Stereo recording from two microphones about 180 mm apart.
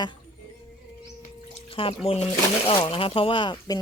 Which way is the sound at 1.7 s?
30° left (ahead or behind).